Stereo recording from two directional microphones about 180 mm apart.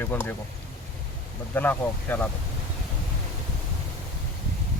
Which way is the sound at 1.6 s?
10° left (ahead or behind).